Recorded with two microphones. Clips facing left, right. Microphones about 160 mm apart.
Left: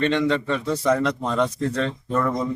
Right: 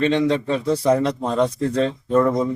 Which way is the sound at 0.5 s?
30° right (ahead or behind).